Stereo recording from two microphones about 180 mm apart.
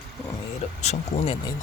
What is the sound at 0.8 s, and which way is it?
Speech, 30° left (ahead or behind).